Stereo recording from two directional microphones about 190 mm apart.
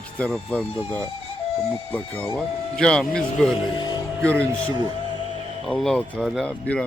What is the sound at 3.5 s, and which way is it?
Speech, 25° left (ahead or behind).